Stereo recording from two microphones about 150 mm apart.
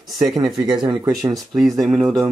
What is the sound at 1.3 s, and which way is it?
Speech, centre (ahead or behind).